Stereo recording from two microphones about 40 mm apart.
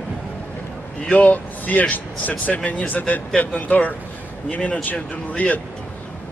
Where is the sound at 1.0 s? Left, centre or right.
Left.